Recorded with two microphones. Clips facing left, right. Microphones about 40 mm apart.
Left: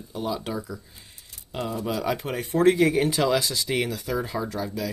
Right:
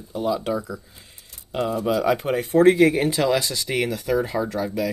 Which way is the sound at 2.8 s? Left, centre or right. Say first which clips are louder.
Right 3 dB; right.